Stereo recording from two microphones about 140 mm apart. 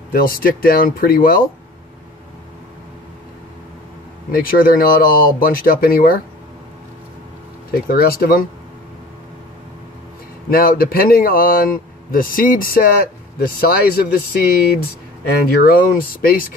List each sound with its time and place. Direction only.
0.1 s speech: 90° left
4.3 s speech: 90° left
7.9 s speech: 90° left
10.5 s speech: 90° left